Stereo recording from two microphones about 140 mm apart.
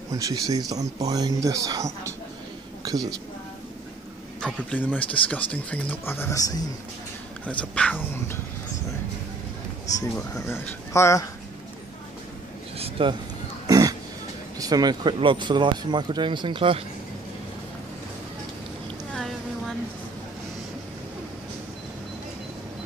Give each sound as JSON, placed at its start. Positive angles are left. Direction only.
{"t": 0.1, "sound": "a woman's voice", "side_deg": -25}
{"t": 4.4, "sound": "speech", "side_deg": 5}
{"t": 7.4, "sound": "speech", "side_deg": 10}
{"t": 10.3, "sound": "speech", "side_deg": 15}
{"t": 12.7, "sound": "a sound", "side_deg": -45}
{"t": 13.7, "sound": "a sound", "side_deg": -25}
{"t": 14.6, "sound": "speech", "side_deg": -30}